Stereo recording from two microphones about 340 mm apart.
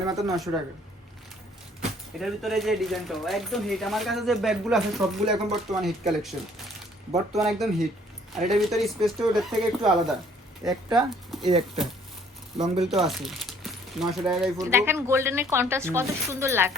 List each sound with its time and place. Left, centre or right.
0.3 s speech: centre
2.1 s speech: centre
12.5 s speech: centre
13.1 s speech: centre